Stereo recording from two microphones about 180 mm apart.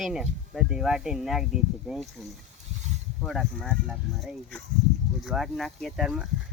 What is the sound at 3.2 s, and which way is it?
Speech, centre (ahead or behind).